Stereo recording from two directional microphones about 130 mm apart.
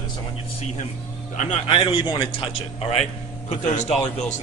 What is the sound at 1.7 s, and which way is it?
Speech, 45° left (ahead or behind).